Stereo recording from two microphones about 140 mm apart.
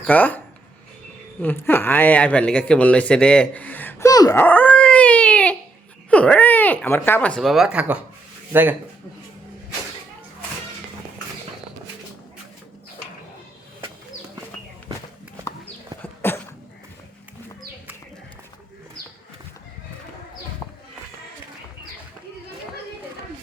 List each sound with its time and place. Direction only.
0.1 s speech: 10° left (ahead or behind)
4.1 s speech: 25° left (ahead or behind)
4.4 s dog: 15° left (ahead or behind)
6.1 s speech: 10° left (ahead or behind); by 8.7 s 15° right (ahead or behind)
16.0 s a sound: 15° left (ahead or behind)